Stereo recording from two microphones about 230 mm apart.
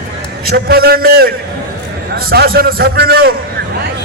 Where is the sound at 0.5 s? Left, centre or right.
Right.